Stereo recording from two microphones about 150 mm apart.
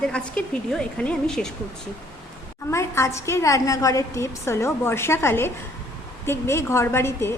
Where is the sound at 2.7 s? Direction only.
20° left (ahead or behind).